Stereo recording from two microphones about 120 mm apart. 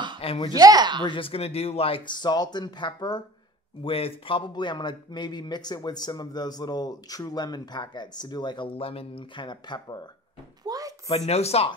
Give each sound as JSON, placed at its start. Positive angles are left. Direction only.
{"t": 0.2, "sound": "speech", "side_deg": 50}
{"t": 0.6, "sound": "speech", "side_deg": -35}
{"t": 1.0, "sound": "a man's voice", "side_deg": 45}
{"t": 3.8, "sound": "a man's voice", "side_deg": 50}
{"t": 10.6, "sound": "a sound", "side_deg": -30}
{"t": 11.1, "sound": "speech", "side_deg": 60}